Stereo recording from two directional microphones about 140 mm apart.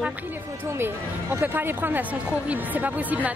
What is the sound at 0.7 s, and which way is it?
Speech, 15° right (ahead or behind).